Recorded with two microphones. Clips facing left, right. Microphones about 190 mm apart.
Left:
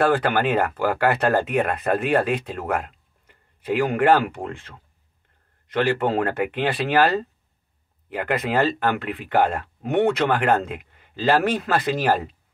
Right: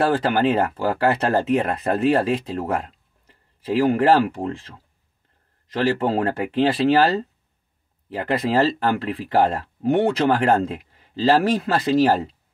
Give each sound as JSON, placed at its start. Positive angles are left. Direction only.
{"t": 0.0, "sound": "speech", "side_deg": -30}